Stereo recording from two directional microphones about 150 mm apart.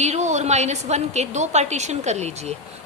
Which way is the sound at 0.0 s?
50° right (ahead or behind).